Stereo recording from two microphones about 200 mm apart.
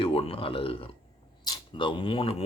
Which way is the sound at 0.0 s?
25° left (ahead or behind).